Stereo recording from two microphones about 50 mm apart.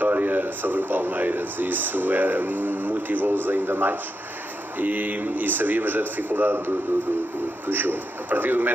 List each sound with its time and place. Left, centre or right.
0.0 s speech: right